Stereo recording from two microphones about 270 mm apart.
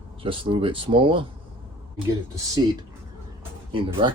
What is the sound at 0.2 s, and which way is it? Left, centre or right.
Speech, centre.